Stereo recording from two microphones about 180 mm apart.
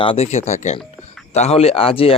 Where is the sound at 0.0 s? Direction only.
35° left (ahead or behind).